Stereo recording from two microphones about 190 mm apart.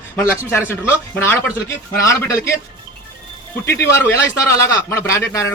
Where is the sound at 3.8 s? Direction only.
15° left (ahead or behind).